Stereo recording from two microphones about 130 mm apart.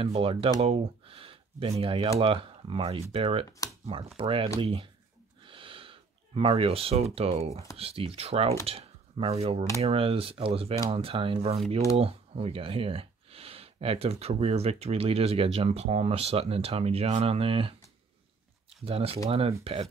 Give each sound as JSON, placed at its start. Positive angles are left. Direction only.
{"t": 0.0, "sound": "speech", "side_deg": -45}
{"t": 3.4, "sound": "speech", "side_deg": 25}
{"t": 4.2, "sound": "speech", "side_deg": -45}
{"t": 5.4, "sound": "a sound", "side_deg": -40}
{"t": 7.7, "sound": "speech", "side_deg": -50}
{"t": 18.9, "sound": "speech", "side_deg": -45}